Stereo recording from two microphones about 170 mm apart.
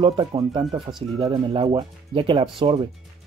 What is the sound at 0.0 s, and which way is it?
Speech, 30° right (ahead or behind).